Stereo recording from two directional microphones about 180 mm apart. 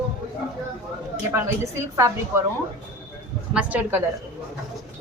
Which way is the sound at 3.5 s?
5° right (ahead or behind).